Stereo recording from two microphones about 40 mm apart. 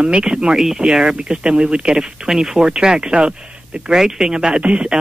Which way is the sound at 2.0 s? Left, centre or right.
Centre.